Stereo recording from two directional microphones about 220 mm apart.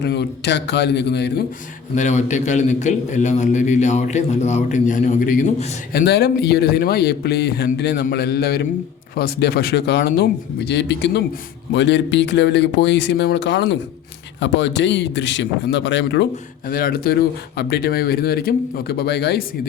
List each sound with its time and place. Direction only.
0.0 s a man's voice: 50° left (ahead or behind)
2.0 s a man's voice: 30° left (ahead or behind)
5.9 s a man's voice: 45° left (ahead or behind)
16.6 s a man's voice: 40° left (ahead or behind)